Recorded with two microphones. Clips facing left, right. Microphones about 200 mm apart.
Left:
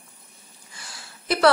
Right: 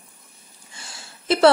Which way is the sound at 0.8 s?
25° right (ahead or behind).